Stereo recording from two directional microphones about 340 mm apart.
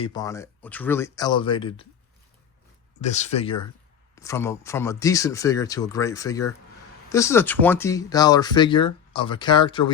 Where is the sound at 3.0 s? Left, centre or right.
Centre.